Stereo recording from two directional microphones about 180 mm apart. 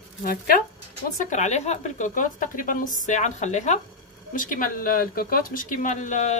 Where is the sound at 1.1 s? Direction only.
45° left (ahead or behind).